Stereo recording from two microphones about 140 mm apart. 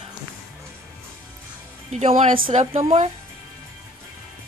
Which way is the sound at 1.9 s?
50° right (ahead or behind).